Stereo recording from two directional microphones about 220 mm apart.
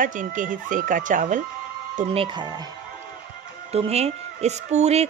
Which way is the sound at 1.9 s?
25° right (ahead or behind).